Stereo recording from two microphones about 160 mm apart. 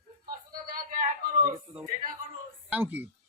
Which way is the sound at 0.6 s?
60° right (ahead or behind).